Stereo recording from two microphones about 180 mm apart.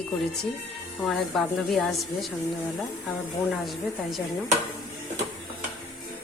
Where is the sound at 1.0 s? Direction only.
5° left (ahead or behind).